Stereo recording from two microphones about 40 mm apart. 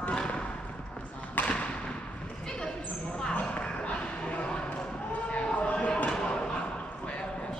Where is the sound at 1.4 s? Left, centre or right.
Left.